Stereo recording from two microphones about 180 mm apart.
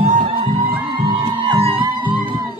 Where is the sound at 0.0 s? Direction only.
35° right (ahead or behind).